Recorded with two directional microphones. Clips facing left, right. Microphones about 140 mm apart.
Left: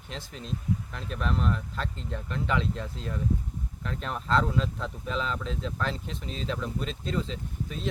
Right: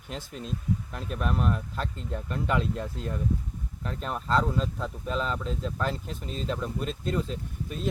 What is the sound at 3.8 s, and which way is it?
Speech, 5° right (ahead or behind).